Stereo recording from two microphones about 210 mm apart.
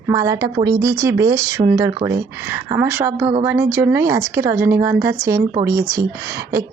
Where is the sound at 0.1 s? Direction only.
15° right (ahead or behind).